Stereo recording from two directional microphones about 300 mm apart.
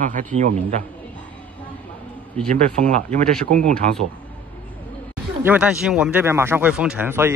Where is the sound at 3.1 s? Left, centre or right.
Right.